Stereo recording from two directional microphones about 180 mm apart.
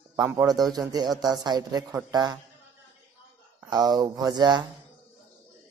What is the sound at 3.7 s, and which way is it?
Speech, 20° right (ahead or behind).